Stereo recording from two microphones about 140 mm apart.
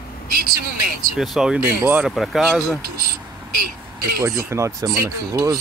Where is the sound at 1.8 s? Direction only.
15° right (ahead or behind).